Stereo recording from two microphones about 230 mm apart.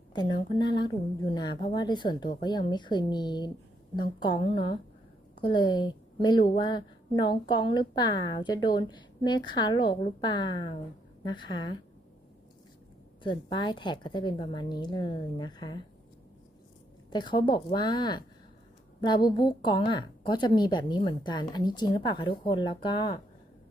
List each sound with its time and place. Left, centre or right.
0.1 s a woman's voice: centre
13.2 s a woman's voice: left
17.1 s a woman's voice: centre